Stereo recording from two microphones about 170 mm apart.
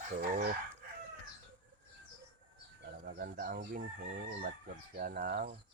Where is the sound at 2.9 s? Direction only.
70° right (ahead or behind).